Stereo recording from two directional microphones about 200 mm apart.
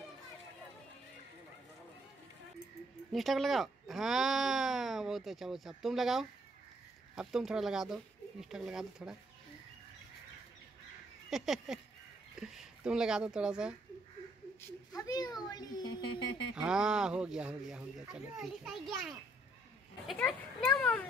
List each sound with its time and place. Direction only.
3.1 s speech: centre (ahead or behind)
11.2 s speech: centre (ahead or behind)
14.9 s a child's voice: 20° left (ahead or behind)
16.5 s a child's voice: 5° right (ahead or behind)